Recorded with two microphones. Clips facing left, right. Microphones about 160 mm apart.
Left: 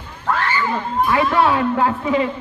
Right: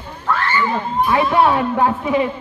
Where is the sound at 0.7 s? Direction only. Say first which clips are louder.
Even; 20° right (ahead or behind).